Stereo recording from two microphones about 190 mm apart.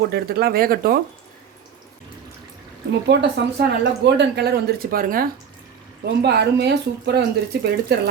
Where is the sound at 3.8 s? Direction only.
65° right (ahead or behind); by 5.2 s 50° right (ahead or behind).